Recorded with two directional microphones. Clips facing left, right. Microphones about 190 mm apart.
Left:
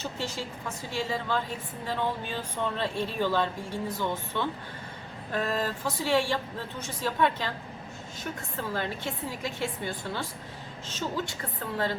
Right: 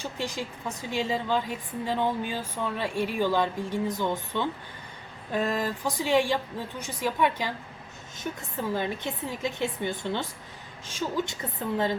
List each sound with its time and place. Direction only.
0.0 s a woman's voice: 15° right (ahead or behind)